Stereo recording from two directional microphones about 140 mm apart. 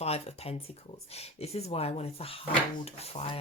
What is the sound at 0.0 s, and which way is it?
Speech, 45° left (ahead or behind).